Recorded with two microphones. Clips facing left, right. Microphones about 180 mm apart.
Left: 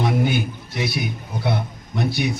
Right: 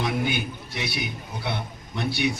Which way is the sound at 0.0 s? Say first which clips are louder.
Left 5 dB; 45° left (ahead or behind).